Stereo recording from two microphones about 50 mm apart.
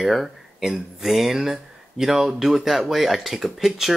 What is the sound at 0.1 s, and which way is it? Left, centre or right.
Speech, centre.